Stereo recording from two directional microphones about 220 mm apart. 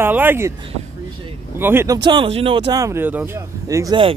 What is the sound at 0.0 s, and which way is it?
Speech, 10° right (ahead or behind).